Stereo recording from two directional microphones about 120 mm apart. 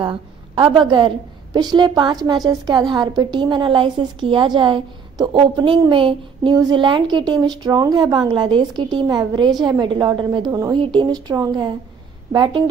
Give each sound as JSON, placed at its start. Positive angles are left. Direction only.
{"t": 0.0, "sound": "a woman's voice", "side_deg": -45}
{"t": 5.9, "sound": "a sound", "side_deg": -45}
{"t": 6.5, "sound": "a woman's voice", "side_deg": -35}